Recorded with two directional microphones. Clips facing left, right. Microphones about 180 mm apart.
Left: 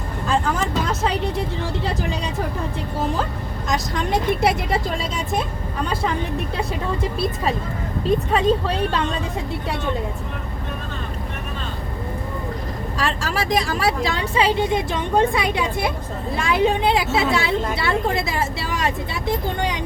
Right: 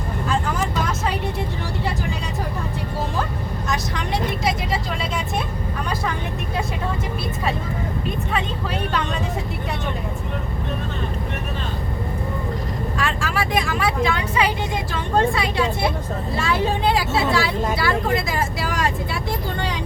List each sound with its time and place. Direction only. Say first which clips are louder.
8.0 s speech: left 11 dB; 35° left (ahead or behind)
13.0 s speech: left 1 dB; 35° left (ahead or behind); by 19.8 s 15° left (ahead or behind)